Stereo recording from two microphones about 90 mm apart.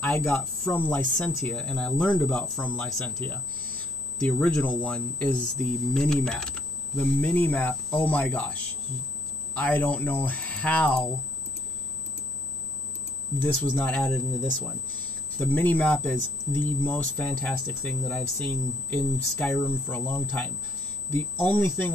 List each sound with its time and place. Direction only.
0.4 s speech: 20° left (ahead or behind)
2.9 s speech: 10° left (ahead or behind)
13.4 s speech: 20° left (ahead or behind)
14.1 s speech: centre (ahead or behind)
15.0 s speech: 15° left (ahead or behind)
19.6 s speech: 25° left (ahead or behind)